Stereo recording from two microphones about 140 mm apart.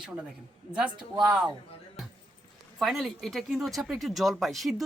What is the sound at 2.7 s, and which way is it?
Speech, centre (ahead or behind).